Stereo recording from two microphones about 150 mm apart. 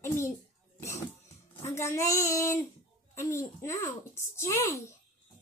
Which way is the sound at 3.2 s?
20° left (ahead or behind).